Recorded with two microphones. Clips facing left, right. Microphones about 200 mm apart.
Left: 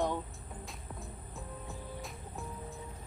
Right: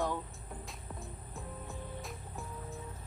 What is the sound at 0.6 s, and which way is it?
Music, centre (ahead or behind).